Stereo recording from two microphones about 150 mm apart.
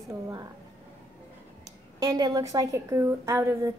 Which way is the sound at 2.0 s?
25° right (ahead or behind).